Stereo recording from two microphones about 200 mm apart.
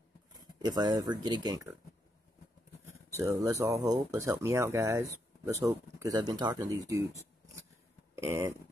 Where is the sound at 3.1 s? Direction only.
15° right (ahead or behind).